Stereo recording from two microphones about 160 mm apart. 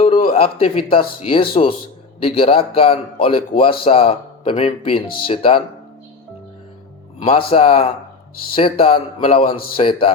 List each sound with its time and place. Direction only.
0.0 s speech: 40° left (ahead or behind)
7.2 s speech: 35° left (ahead or behind)